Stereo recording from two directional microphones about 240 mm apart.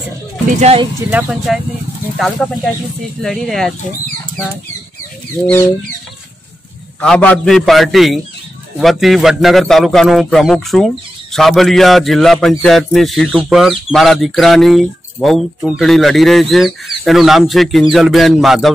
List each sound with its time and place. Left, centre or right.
0.6 s speech: right
1.1 s a man's voice: centre
7.0 s a man's voice: centre